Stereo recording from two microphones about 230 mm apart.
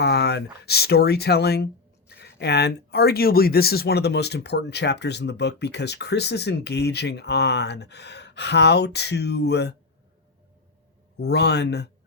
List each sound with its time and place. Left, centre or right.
0.0 s speech: left
11.2 s speech: left